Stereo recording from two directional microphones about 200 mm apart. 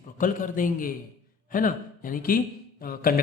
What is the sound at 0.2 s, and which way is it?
A man's voice, 40° left (ahead or behind).